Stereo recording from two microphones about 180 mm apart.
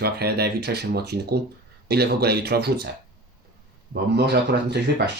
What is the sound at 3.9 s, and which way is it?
Speech, 70° right (ahead or behind).